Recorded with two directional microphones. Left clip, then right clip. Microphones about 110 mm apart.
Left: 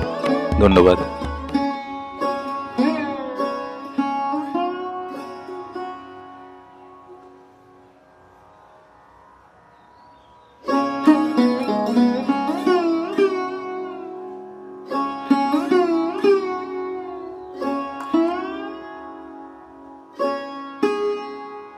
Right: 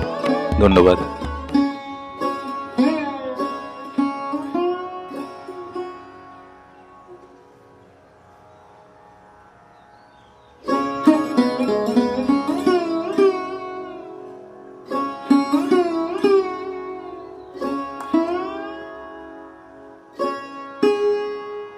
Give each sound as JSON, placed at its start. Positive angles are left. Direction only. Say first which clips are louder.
{"t": 0.0, "sound": "music", "louder": "even", "side_deg": 0}
{"t": 1.5, "sound": "music", "louder": "right 2 dB", "side_deg": -20}
{"t": 10.6, "sound": "music", "louder": "even", "side_deg": -20}
{"t": 14.9, "sound": "music", "louder": "right 1 dB", "side_deg": -20}
{"t": 20.2, "sound": "music", "louder": "left 1 dB", "side_deg": -20}